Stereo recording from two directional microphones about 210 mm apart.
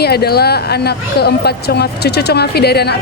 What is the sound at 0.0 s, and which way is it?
Speech, 50° left (ahead or behind).